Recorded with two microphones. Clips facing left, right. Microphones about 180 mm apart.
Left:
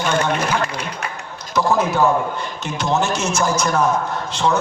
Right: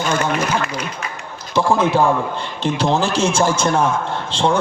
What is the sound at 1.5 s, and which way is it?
A man's voice, 30° right (ahead or behind).